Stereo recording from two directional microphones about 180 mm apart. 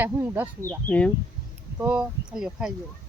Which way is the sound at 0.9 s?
10° left (ahead or behind).